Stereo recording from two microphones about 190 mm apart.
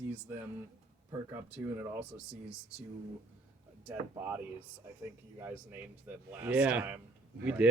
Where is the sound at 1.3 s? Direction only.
5° right (ahead or behind).